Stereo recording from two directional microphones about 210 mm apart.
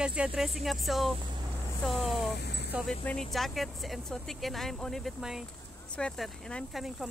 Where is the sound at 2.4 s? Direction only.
50° left (ahead or behind).